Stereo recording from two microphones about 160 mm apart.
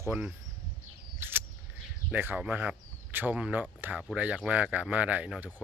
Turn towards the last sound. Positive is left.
turn(degrees=-10)  # may be behind; listen again after turning